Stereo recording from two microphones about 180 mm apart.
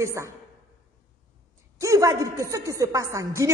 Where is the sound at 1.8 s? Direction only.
20° right (ahead or behind).